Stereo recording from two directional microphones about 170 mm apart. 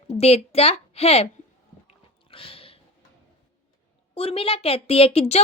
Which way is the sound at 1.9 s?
35° left (ahead or behind).